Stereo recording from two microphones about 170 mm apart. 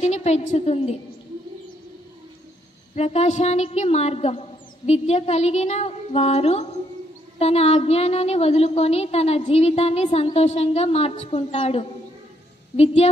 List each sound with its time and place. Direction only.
0.0 s a woman's voice: 40° left (ahead or behind)
2.9 s a woman's voice: 40° left (ahead or behind)